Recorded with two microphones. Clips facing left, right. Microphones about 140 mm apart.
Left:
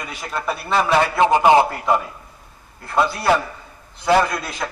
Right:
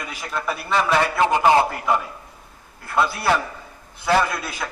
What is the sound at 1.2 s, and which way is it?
Speech, 20° left (ahead or behind).